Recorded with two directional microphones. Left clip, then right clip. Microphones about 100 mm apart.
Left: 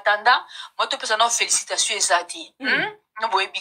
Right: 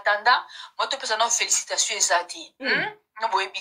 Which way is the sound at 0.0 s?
40° left (ahead or behind).